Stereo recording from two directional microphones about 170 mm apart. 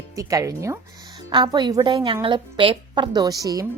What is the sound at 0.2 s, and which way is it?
A woman's voice, 20° right (ahead or behind).